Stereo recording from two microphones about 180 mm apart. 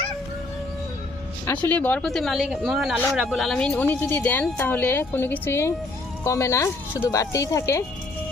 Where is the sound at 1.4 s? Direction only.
10° left (ahead or behind).